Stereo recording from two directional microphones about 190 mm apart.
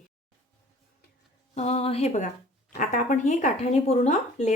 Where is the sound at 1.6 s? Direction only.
35° left (ahead or behind).